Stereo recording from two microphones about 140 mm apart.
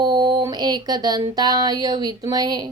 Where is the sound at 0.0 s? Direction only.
30° right (ahead or behind).